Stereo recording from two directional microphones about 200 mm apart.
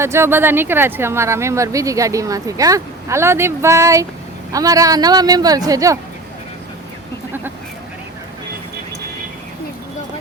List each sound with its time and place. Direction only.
0.0 s a man's voice: 15° right (ahead or behind)